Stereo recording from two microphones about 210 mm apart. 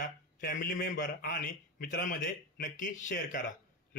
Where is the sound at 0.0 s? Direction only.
40° left (ahead or behind).